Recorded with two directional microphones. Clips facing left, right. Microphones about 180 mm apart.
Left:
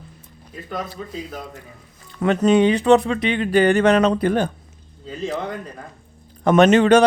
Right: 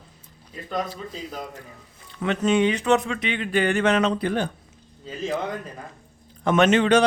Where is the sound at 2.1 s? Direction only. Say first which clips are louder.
Left 5 dB; 40° left (ahead or behind).